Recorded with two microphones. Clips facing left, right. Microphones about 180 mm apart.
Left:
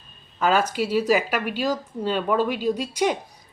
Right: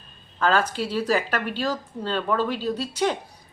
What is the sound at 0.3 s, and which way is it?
A woman's voice, 10° left (ahead or behind).